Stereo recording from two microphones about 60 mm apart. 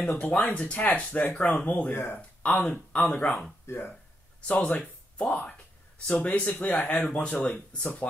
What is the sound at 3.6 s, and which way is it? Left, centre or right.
Speech, left.